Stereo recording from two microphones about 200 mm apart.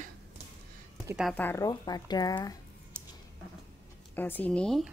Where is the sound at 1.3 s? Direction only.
10° left (ahead or behind).